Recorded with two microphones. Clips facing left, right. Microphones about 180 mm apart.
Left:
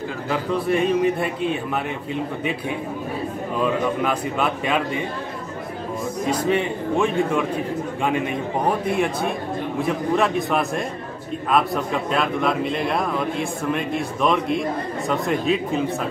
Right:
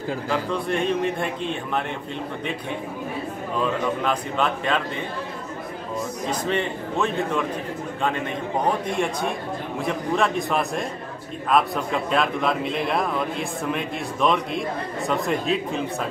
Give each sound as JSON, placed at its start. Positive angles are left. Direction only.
{"t": 0.3, "sound": "a man's voice", "side_deg": 5}
{"t": 4.0, "sound": "a man's voice", "side_deg": 10}
{"t": 6.4, "sound": "a man's voice", "side_deg": 10}